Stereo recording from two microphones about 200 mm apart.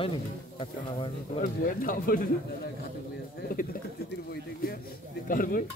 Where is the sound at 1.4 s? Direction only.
45° left (ahead or behind).